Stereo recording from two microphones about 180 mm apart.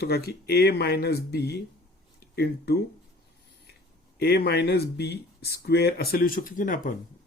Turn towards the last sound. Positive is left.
turn(degrees=50)  # may be behind; listen again after turning